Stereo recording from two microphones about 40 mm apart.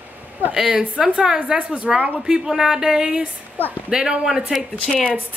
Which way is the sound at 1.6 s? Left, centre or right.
Right.